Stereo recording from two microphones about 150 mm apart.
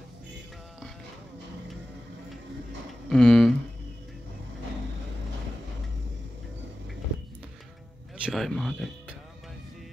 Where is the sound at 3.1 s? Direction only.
Centre (ahead or behind).